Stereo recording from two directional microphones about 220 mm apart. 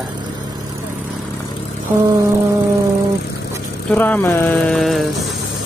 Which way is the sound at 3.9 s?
10° left (ahead or behind).